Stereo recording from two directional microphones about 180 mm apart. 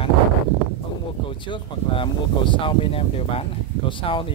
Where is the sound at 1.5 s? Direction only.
25° left (ahead or behind).